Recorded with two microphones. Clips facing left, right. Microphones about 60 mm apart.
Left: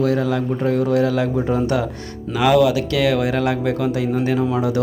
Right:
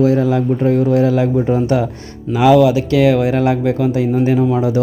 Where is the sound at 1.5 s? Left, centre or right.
Centre.